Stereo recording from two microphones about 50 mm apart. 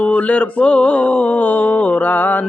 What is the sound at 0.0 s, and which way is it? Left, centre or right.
Mantra, left.